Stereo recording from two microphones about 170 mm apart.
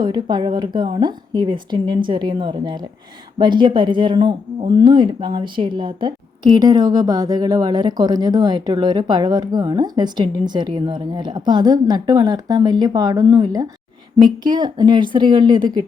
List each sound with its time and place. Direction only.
0.0 s speech: 25° right (ahead or behind)